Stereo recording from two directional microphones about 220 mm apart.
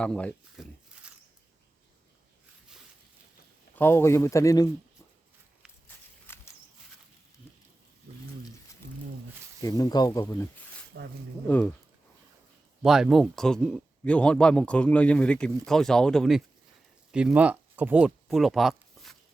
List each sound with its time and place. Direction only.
0.0 s a sound: 5° left (ahead or behind)
3.8 s speech: 10° left (ahead or behind)
6.2 s walk: 10° left (ahead or behind)
9.6 s speech: 15° left (ahead or behind)
10.9 s speech: 50° right (ahead or behind)
11.4 s speech: 5° left (ahead or behind)
12.8 s speech: centre (ahead or behind)